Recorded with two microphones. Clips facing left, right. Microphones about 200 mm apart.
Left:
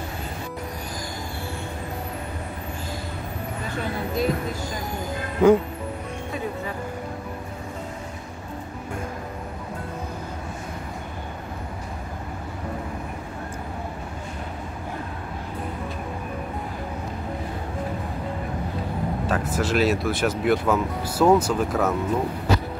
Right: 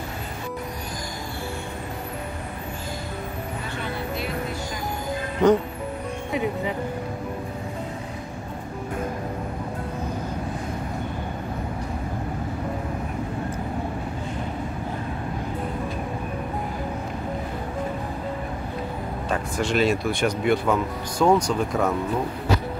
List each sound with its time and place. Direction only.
5.4 s speech: 10° left (ahead or behind)
19.2 s speech: 5° left (ahead or behind)